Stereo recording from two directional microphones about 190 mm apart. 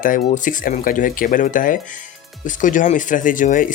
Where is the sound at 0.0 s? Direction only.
45° left (ahead or behind).